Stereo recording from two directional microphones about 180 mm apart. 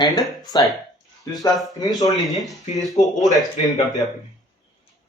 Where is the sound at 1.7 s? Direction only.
20° left (ahead or behind).